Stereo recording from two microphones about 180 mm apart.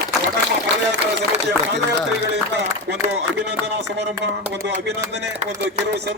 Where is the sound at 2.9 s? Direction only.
70° right (ahead or behind).